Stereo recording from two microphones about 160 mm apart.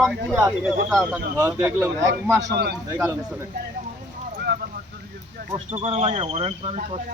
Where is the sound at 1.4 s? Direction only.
15° right (ahead or behind).